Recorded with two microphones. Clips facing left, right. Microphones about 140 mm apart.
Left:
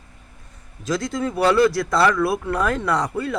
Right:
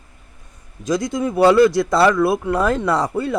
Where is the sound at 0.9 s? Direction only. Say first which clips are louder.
Right 3 dB; 20° right (ahead or behind).